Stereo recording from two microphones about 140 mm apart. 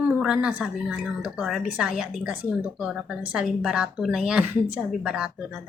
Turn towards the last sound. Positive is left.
turn(degrees=-5)  # may be behind; listen again after turning